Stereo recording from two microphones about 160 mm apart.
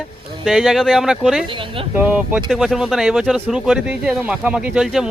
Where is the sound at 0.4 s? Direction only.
5° right (ahead or behind).